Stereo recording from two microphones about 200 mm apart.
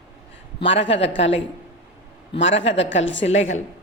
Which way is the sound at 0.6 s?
65° left (ahead or behind).